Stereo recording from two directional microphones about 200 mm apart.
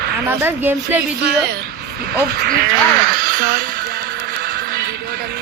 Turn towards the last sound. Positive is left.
turn(degrees=-50)  # may be behind; listen again after turning